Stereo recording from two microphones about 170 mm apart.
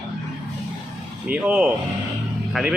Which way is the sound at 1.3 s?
5° right (ahead or behind).